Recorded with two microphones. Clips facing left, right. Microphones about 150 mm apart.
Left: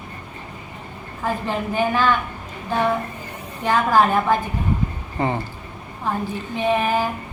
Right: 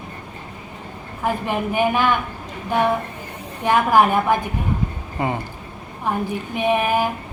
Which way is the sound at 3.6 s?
15° right (ahead or behind).